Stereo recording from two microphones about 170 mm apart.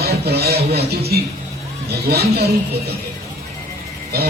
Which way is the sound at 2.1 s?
70° right (ahead or behind).